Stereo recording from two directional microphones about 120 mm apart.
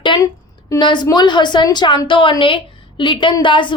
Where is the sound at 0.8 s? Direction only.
40° left (ahead or behind).